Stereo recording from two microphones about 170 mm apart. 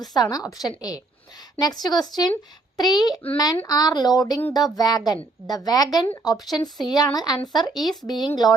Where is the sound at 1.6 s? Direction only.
25° left (ahead or behind).